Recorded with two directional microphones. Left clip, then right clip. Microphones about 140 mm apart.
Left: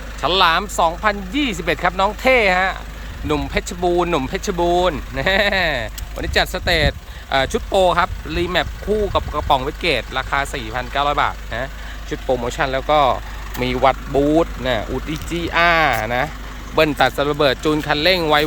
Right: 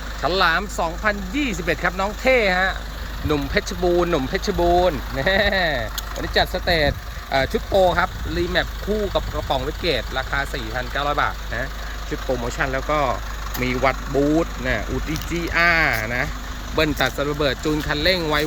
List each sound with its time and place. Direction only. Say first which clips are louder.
0.2 s speech: left 4 dB; 15° left (ahead or behind); by 15.5 s 30° left (ahead or behind)
15.5 s speech: left 3 dB; 20° left (ahead or behind)